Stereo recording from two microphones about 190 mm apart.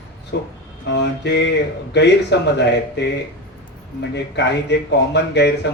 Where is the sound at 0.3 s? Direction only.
65° left (ahead or behind).